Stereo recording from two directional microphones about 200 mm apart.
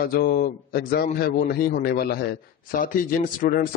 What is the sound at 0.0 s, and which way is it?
A man's voice, 50° left (ahead or behind).